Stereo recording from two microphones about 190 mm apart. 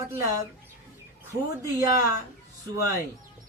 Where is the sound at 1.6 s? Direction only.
15° right (ahead or behind).